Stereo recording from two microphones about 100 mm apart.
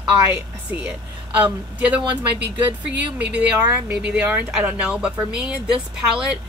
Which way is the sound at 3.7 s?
15° right (ahead or behind).